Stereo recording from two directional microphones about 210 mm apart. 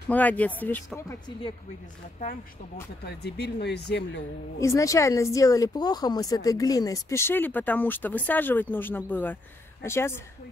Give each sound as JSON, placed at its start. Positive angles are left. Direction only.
{"t": 0.1, "sound": "speech", "side_deg": 5}
{"t": 3.1, "sound": "speech", "side_deg": 50}
{"t": 4.6, "sound": "speech", "side_deg": 15}